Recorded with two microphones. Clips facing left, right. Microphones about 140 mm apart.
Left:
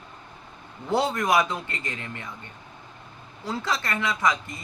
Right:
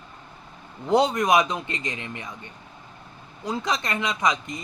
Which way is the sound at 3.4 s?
15° right (ahead or behind).